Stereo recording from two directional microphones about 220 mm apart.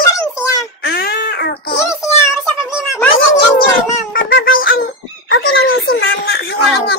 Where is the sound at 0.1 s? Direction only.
15° left (ahead or behind).